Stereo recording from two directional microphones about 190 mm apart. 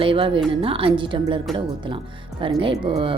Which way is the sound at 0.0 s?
30° right (ahead or behind).